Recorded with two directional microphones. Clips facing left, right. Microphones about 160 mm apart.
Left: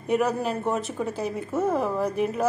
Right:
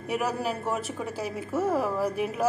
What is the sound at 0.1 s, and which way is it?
A woman's voice, 5° right (ahead or behind).